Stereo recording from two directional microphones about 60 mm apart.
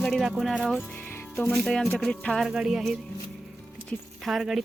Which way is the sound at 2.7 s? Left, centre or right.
Centre.